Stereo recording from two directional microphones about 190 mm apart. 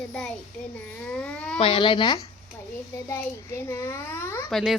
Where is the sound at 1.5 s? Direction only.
30° left (ahead or behind); by 4.4 s 10° left (ahead or behind).